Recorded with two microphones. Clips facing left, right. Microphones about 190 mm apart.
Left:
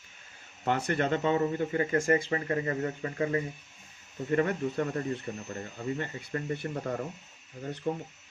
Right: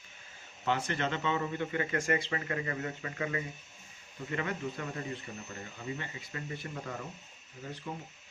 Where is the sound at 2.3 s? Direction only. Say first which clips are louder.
Left 5 dB; 35° left (ahead or behind).